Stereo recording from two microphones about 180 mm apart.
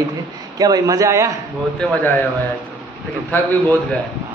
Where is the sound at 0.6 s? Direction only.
20° right (ahead or behind).